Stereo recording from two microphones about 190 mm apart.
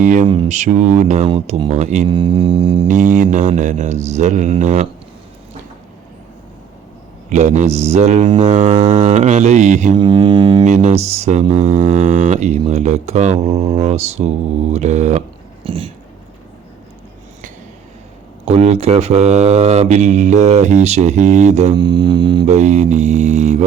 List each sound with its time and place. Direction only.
0.0 s music: 40° right (ahead or behind)
1.3 s speech: 30° right (ahead or behind)
2.8 s music: 40° right (ahead or behind)
7.3 s music: 40° right (ahead or behind)
10.0 s speech: 25° right (ahead or behind)
10.6 s music: 40° right (ahead or behind)
15.6 s speech: 30° right (ahead or behind)
18.4 s music: 35° right (ahead or behind)
21.8 s music: 25° right (ahead or behind)